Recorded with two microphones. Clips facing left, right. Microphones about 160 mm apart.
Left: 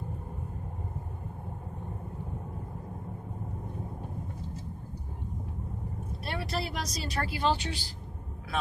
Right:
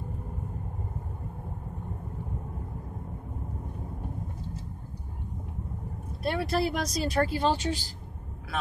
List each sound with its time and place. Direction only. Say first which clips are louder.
6.2 s speech: right 7 dB; 50° right (ahead or behind)